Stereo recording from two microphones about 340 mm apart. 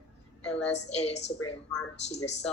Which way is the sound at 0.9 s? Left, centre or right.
Centre.